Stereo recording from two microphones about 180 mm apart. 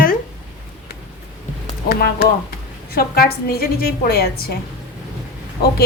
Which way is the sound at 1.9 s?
60° left (ahead or behind).